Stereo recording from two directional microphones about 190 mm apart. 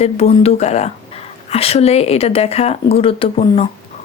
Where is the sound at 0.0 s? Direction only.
30° left (ahead or behind).